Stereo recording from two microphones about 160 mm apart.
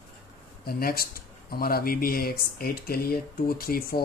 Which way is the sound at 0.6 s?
70° left (ahead or behind).